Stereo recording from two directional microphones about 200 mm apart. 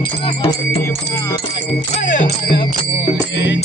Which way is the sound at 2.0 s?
45° left (ahead or behind).